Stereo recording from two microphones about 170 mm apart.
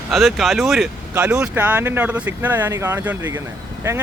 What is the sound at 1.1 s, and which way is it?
Speech, 15° right (ahead or behind).